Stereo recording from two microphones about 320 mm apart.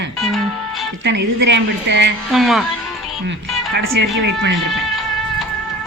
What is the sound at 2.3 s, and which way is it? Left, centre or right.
Speech, centre.